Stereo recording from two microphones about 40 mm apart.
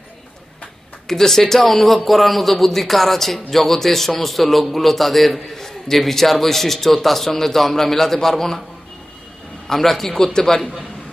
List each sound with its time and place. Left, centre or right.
1.0 s a man's voice: centre
9.7 s a man's voice: centre